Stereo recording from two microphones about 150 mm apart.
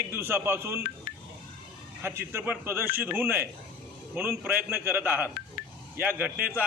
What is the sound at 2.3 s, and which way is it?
A man's voice, 15° right (ahead or behind).